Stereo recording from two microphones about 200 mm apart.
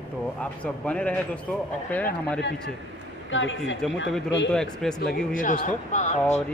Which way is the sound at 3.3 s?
70° left (ahead or behind).